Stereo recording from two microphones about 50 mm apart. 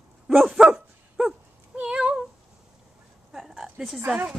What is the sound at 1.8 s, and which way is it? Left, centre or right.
Cat, centre.